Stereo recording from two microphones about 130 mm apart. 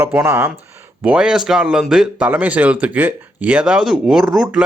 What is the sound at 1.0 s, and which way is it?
Speech, 5° right (ahead or behind).